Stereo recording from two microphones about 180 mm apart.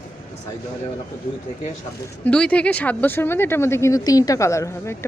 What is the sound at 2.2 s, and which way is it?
Speech, 5° left (ahead or behind).